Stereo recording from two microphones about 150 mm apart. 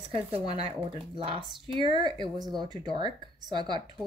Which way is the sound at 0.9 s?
35° right (ahead or behind).